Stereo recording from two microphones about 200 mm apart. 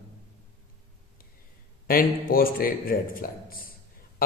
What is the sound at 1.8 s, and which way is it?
A man's voice, 45° left (ahead or behind).